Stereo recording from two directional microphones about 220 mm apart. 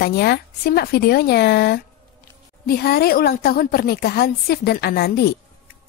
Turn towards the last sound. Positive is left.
turn(degrees=45)  # may be behind; listen again after turning